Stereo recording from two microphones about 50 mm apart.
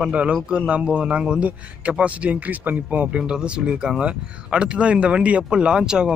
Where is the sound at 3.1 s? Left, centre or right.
Centre.